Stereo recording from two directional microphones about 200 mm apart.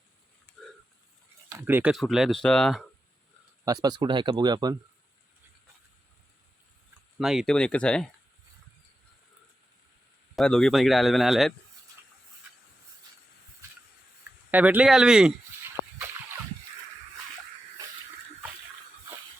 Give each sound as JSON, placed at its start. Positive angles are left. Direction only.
{"t": 1.5, "sound": "speech", "side_deg": -10}
{"t": 3.7, "sound": "speech", "side_deg": -20}
{"t": 7.2, "sound": "speech", "side_deg": 0}
{"t": 10.3, "sound": "speech", "side_deg": 5}
{"t": 14.5, "sound": "speech", "side_deg": -5}